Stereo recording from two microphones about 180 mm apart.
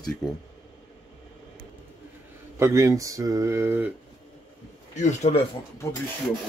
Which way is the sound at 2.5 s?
15° right (ahead or behind).